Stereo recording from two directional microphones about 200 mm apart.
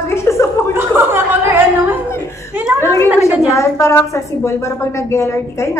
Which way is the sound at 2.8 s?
15° left (ahead or behind).